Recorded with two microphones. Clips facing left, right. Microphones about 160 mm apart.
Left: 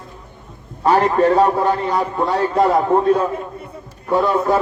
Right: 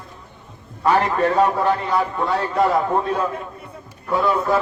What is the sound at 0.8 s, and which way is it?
A man's voice, 35° left (ahead or behind).